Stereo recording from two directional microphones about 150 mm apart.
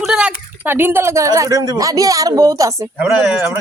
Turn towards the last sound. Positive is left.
turn(degrees=-5)  # may be behind; listen again after turning